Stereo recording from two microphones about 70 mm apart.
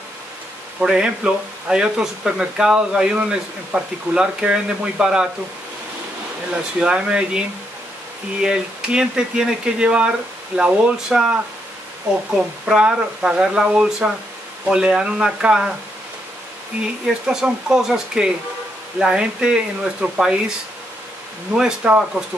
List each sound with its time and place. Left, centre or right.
0.7 s speech: centre
6.8 s speech: centre
12.3 s speech: centre
16.8 s speech: centre
21.5 s speech: centre